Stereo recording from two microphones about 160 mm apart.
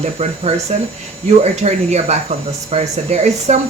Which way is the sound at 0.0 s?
40° right (ahead or behind).